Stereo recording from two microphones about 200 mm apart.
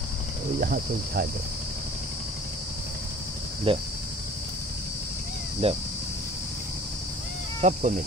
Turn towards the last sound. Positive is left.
turn(degrees=-35)  # may be behind; listen again after turning